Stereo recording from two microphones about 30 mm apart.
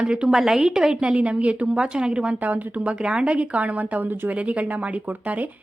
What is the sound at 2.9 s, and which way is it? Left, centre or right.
Speech, right.